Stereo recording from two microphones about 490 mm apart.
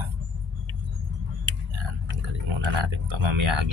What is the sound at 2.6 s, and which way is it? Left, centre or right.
Speech, right.